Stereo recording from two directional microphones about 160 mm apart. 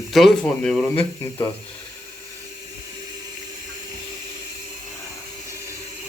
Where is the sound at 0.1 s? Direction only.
Centre (ahead or behind).